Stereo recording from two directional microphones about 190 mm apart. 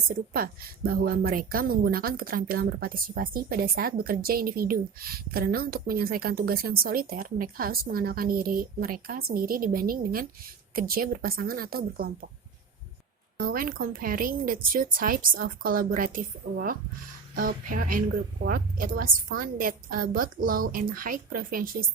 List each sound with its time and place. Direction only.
0.1 s a woman's voice: 50° right (ahead or behind)
13.4 s a woman's voice: 50° right (ahead or behind)